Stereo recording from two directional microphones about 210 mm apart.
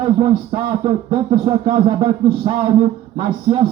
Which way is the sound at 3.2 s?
25° right (ahead or behind).